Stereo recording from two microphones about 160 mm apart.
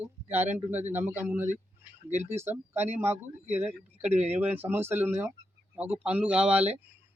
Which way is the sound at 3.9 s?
40° right (ahead or behind).